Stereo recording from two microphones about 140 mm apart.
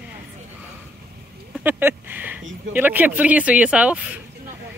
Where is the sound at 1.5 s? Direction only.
15° right (ahead or behind).